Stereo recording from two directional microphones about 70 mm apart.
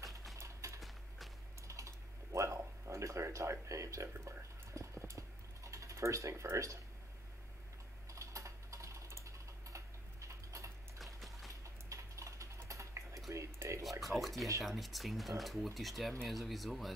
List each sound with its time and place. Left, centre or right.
0.4 s a sound: right
0.7 s clip-clop: centre
1.7 s typing: right
3.3 s a sound: right
8.1 s typing: right
11.1 s music: centre
11.6 s typing: right
13.3 s a sound: right
14.0 s speech: centre